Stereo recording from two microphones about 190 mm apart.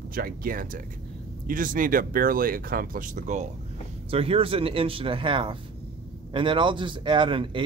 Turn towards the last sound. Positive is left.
turn(degrees=-25)  # may be behind; listen again after turning